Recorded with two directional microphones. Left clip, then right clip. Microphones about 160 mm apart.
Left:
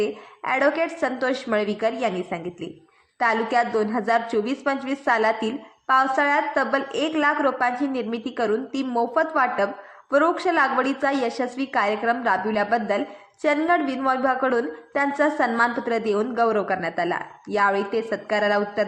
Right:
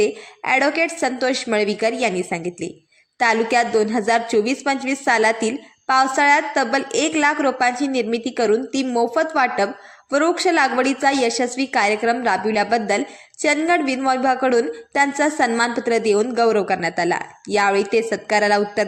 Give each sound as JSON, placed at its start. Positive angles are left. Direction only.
{"t": 0.0, "sound": "a woman's voice", "side_deg": -30}